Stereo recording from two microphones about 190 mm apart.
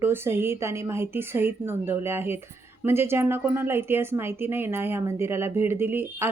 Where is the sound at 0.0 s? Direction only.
10° right (ahead or behind).